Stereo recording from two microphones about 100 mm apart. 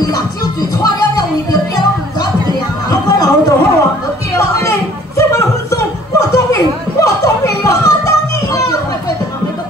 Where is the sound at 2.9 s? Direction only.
40° left (ahead or behind).